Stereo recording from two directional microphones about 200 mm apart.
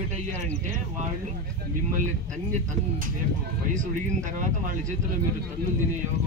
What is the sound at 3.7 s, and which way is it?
Speech, 40° right (ahead or behind).